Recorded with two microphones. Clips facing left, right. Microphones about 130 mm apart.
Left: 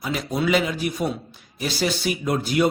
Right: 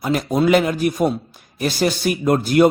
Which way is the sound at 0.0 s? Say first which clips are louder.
Right 7 dB; 50° right (ahead or behind).